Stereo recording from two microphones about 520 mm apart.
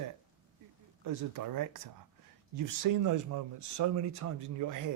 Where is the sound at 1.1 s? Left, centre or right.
Right.